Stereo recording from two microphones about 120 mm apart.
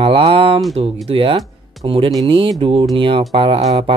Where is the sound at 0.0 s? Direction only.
50° right (ahead or behind).